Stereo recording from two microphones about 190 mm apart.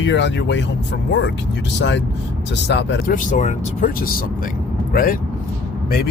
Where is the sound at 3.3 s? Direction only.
40° left (ahead or behind).